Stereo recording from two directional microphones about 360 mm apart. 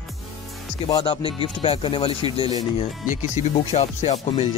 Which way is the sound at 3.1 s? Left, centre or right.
Centre.